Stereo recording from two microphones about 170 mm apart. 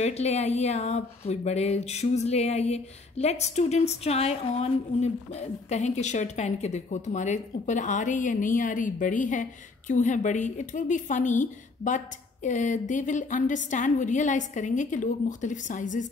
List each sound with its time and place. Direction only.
0.0 s a woman's voice: 40° left (ahead or behind)